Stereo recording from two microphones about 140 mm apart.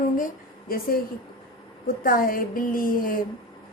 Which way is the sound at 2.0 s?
90° left.